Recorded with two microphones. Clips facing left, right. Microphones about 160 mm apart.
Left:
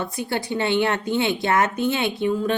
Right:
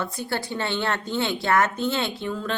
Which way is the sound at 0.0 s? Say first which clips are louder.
Left 2 dB; 15° left (ahead or behind).